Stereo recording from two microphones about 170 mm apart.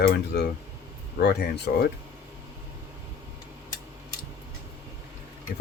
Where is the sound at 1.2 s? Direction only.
60° left (ahead or behind).